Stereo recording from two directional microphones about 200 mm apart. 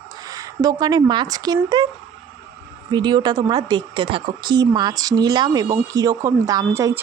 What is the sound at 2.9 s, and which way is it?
Speech, 20° right (ahead or behind).